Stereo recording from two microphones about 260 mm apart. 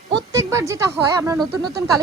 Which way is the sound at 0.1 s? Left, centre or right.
Centre.